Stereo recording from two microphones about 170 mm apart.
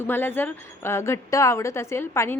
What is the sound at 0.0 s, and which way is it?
A woman's voice, 15° left (ahead or behind).